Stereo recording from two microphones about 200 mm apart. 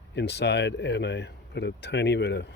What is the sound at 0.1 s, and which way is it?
Speech, 60° left (ahead or behind).